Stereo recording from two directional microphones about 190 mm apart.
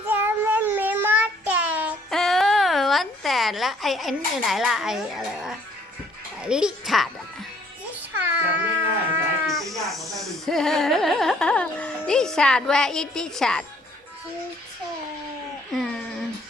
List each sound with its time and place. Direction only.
0.1 s child singing: 10° right (ahead or behind)
2.0 s a sound: centre (ahead or behind)
6.4 s a child's voice: 5° right (ahead or behind)
8.1 s cat: 10° right (ahead or behind)
9.5 s music: centre (ahead or behind)
10.2 s carnatic music: centre (ahead or behind)
15.7 s a sound: centre (ahead or behind)